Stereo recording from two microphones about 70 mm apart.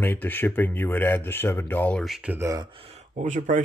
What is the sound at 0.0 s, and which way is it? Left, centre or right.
Speech, left.